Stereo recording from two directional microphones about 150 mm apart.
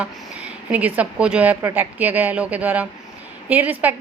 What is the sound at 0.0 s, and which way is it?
A woman's voice, 10° right (ahead or behind).